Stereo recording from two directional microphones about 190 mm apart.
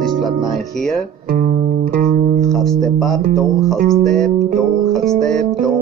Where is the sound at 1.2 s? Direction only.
50° right (ahead or behind).